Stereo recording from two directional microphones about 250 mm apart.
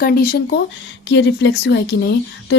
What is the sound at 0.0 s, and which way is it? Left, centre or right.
Speech, left.